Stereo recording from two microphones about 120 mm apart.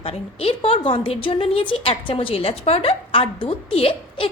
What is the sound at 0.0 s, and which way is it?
A woman's voice, 55° left (ahead or behind).